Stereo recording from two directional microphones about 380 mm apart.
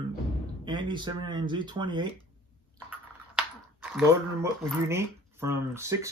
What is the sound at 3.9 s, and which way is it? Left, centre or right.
Speech, centre.